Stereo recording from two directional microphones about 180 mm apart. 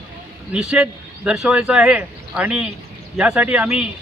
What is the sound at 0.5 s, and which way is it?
Speech, 5° right (ahead or behind).